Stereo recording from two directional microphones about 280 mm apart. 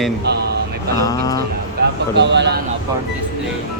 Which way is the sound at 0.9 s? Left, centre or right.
Centre.